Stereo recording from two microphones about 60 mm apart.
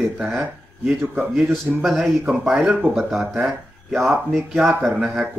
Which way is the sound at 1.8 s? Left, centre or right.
Centre.